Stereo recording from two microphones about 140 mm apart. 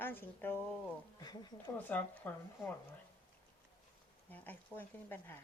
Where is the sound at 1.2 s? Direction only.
30° left (ahead or behind).